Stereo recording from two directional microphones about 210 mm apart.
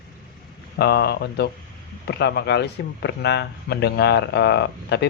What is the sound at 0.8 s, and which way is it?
Speech, 50° left (ahead or behind).